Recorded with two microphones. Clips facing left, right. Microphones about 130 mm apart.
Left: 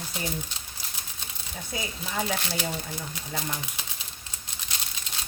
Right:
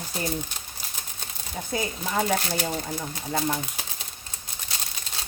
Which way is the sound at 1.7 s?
45° right (ahead or behind).